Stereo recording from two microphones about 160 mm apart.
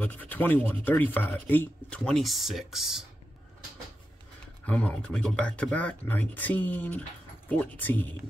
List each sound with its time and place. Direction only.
0.0 s speech: 10° left (ahead or behind)
4.6 s speech: 10° left (ahead or behind)